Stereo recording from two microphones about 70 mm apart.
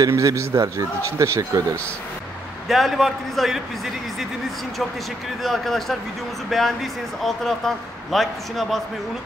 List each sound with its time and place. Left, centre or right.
0.1 s speech: right
2.7 s speech: centre
5.4 s speech: centre